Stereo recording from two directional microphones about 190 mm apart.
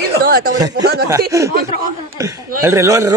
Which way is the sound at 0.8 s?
60° right (ahead or behind).